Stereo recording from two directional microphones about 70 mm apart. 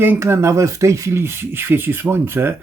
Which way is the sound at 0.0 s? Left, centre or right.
Right.